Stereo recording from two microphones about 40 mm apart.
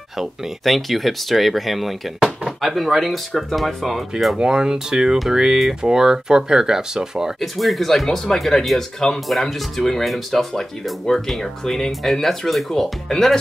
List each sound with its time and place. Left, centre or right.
0.2 s speech: centre
4.4 s speech: centre
7.3 s speech: centre